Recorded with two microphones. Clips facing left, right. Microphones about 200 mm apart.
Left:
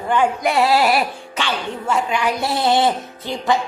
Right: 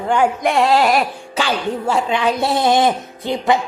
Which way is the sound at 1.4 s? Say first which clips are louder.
Right 5 dB; 40° right (ahead or behind).